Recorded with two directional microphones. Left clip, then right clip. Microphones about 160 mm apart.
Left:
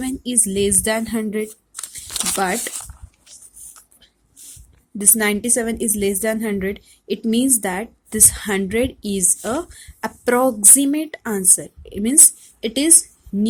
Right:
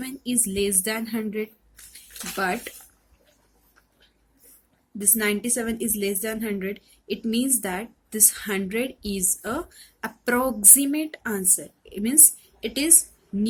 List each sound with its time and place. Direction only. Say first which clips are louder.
0.0 s a woman's voice: left 6 dB; 45° left (ahead or behind)
4.9 s a woman's voice: left 5 dB; 45° left (ahead or behind)